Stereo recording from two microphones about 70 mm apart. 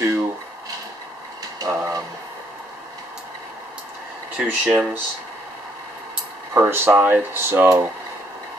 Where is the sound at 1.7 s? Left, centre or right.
Right.